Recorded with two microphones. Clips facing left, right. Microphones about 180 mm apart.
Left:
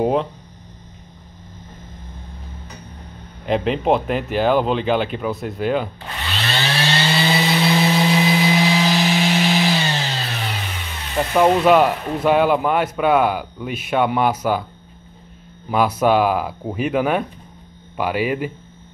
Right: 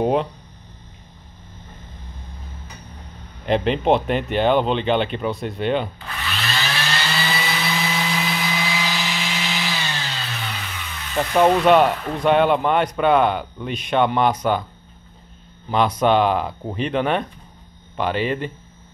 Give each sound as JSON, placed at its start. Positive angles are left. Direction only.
{"t": 0.0, "sound": "speech", "side_deg": 0}
{"t": 3.4, "sound": "speech", "side_deg": 0}
{"t": 6.2, "sound": "vehicle", "side_deg": 30}
{"t": 9.1, "sound": "music", "side_deg": 55}
{"t": 11.6, "sound": "speech", "side_deg": 5}
{"t": 15.7, "sound": "speech", "side_deg": 5}